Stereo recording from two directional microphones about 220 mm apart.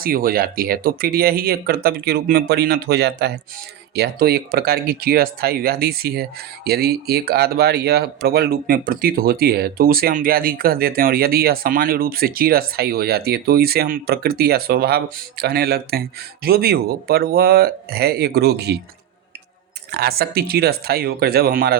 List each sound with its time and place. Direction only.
0.0 s speech: 40° right (ahead or behind)
19.9 s speech: 45° right (ahead or behind)